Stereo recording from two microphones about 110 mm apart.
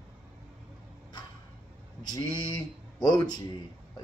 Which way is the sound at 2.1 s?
40° left (ahead or behind).